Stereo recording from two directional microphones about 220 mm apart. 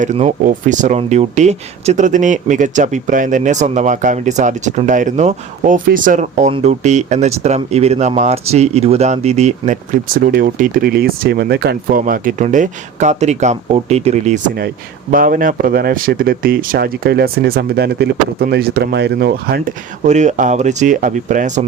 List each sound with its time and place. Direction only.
0.0 s speech: 30° right (ahead or behind)
20.1 s speech: 35° right (ahead or behind)